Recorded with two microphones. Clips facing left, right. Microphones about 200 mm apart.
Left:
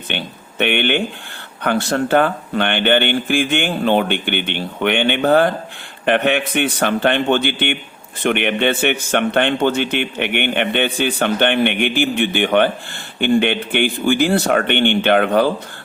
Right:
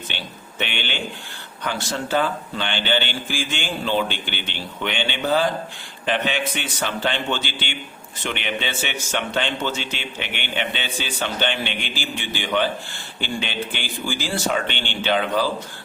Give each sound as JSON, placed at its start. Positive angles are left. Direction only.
{"t": 0.1, "sound": "a man's voice", "side_deg": 60}